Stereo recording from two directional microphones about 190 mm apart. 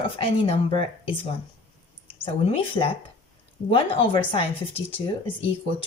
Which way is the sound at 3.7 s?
25° left (ahead or behind).